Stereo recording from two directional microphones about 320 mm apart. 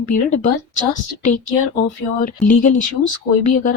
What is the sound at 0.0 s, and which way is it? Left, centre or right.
Speech, left.